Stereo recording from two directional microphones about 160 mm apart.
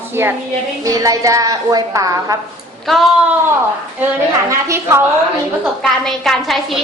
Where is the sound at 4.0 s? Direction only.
15° right (ahead or behind).